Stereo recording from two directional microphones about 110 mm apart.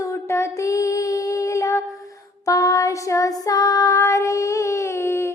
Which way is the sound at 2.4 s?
30° left (ahead or behind).